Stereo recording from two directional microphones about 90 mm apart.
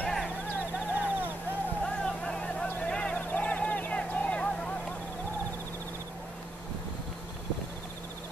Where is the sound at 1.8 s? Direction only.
10° left (ahead or behind).